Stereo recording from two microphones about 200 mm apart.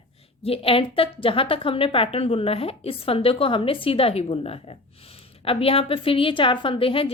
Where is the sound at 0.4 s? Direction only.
30° left (ahead or behind).